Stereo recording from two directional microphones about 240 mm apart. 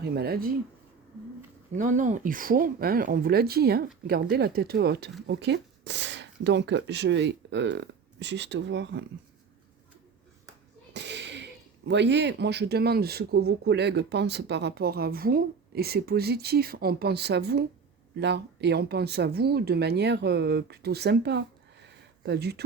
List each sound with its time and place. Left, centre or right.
0.0 s speech: right
1.7 s speech: right
10.9 s a sound: right
11.9 s speech: right